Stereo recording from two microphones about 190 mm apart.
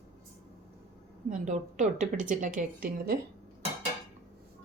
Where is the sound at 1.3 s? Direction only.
40° right (ahead or behind).